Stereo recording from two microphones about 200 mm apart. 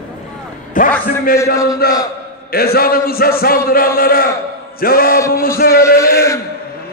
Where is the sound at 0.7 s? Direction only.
45° left (ahead or behind).